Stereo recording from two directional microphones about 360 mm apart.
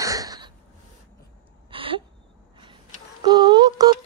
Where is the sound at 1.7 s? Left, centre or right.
Centre.